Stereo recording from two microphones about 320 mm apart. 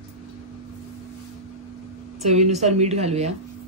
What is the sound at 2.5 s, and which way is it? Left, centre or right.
Speech, right.